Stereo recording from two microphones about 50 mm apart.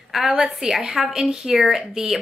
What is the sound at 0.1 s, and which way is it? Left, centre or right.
Speech, centre.